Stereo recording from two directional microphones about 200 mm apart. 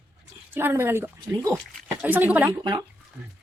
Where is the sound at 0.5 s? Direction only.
10° right (ahead or behind).